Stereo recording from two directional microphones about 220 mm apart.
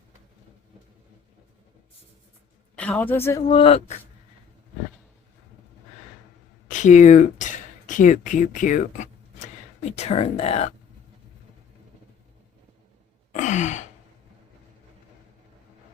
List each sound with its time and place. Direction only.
2.7 s a woman's voice: 5° left (ahead or behind)
3.5 s speech: 25° left (ahead or behind)
6.7 s speech: 35° left (ahead or behind)
13.3 s sigh: 30° left (ahead or behind)